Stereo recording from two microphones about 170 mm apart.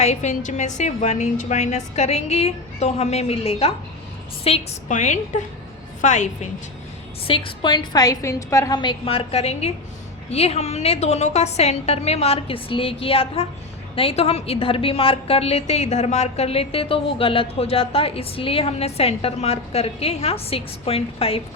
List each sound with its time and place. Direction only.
0.0 s a woman's voice: 45° left (ahead or behind)
7.3 s a woman's voice: 30° left (ahead or behind)